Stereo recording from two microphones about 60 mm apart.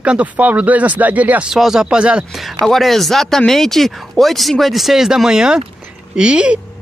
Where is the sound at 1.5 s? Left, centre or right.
Centre.